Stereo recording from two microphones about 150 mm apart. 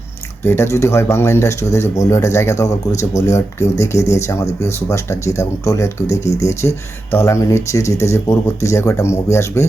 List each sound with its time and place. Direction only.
0.4 s speech: 15° left (ahead or behind)